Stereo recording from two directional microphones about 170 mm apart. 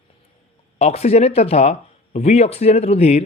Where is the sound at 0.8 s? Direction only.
35° left (ahead or behind).